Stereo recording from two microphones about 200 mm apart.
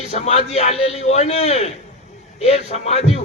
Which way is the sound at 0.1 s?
35° left (ahead or behind).